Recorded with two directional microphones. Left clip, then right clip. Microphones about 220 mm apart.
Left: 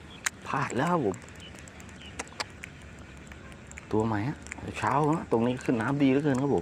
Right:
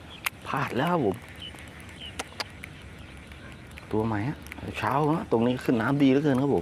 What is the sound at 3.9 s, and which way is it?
Speech, 5° left (ahead or behind).